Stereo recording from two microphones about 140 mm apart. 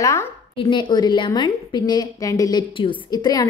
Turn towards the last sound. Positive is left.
turn(degrees=30)  # may be behind; listen again after turning